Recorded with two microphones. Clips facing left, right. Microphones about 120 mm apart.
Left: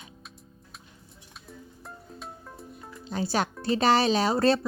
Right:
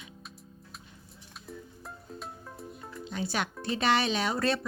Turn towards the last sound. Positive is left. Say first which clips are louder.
# left 6 dB
turn(degrees=35)  # may be behind; listen again after turning